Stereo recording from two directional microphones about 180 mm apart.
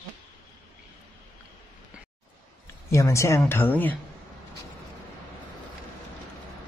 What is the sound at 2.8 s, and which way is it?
Speech, 15° left (ahead or behind).